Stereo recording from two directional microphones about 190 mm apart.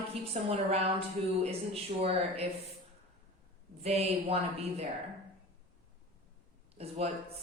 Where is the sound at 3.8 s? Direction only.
35° right (ahead or behind).